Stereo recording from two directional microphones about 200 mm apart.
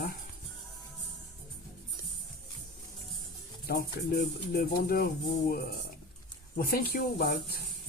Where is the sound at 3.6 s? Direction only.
55° left (ahead or behind).